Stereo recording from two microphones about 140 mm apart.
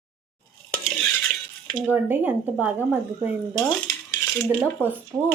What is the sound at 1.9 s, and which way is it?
Speech, 10° right (ahead or behind).